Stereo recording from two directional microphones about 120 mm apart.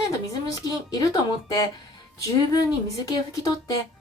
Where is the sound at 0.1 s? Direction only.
30° left (ahead or behind).